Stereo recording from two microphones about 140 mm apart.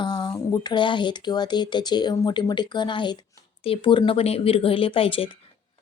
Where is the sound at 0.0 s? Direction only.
35° left (ahead or behind).